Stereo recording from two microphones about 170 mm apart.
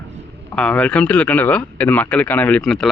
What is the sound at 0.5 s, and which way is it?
A man's voice, 5° left (ahead or behind).